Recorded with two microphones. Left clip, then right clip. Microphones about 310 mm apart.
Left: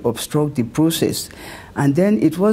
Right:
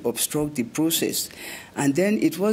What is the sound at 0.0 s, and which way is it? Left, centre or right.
Speech, left.